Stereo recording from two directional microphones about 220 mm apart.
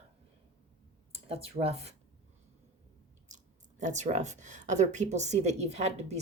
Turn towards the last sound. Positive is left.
turn(degrees=-30)  # may be behind; listen again after turning